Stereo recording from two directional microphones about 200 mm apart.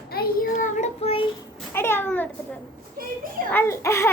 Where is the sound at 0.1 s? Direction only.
45° left (ahead or behind); by 1.3 s 30° left (ahead or behind).